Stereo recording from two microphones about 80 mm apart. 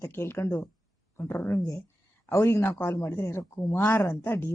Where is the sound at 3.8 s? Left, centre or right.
Left.